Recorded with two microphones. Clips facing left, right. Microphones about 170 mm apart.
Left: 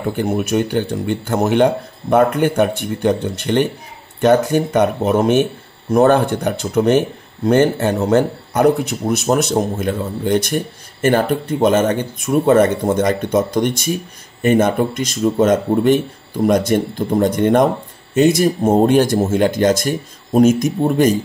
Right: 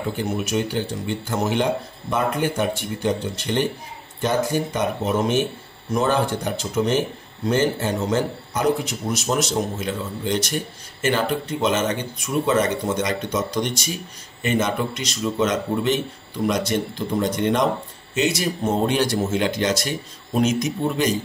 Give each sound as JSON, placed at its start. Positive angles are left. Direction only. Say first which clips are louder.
{"t": 0.2, "sound": "speech", "louder": "left 7 dB", "side_deg": 55}